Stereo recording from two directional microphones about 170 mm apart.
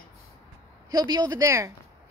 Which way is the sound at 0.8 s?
25° right (ahead or behind).